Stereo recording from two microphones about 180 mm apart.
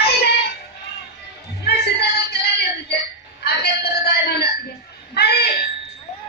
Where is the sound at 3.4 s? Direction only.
65° left (ahead or behind).